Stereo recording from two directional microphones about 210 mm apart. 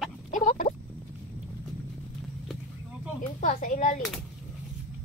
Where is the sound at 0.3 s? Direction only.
40° left (ahead or behind).